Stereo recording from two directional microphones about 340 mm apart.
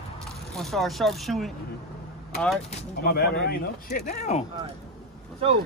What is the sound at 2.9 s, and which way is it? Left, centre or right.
Speech, left.